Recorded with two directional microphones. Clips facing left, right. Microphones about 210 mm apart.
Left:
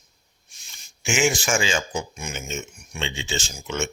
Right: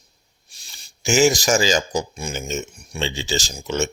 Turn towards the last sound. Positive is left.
turn(degrees=-35)  # may be behind; listen again after turning